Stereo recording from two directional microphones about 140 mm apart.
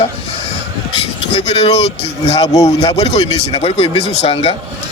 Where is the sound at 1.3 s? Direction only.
45° left (ahead or behind).